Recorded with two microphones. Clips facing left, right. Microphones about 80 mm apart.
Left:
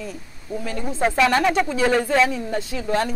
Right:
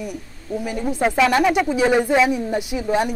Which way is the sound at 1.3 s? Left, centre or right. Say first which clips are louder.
Right 2 dB; centre.